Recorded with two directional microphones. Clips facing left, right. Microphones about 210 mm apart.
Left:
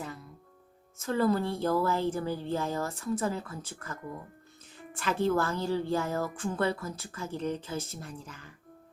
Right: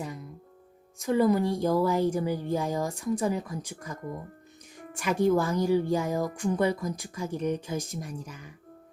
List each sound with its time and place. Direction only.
0.0 s music: 15° right (ahead or behind)
0.9 s a woman's voice: 15° right (ahead or behind)